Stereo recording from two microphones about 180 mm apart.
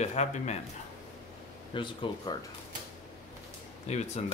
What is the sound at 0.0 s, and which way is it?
Speech, 40° left (ahead or behind).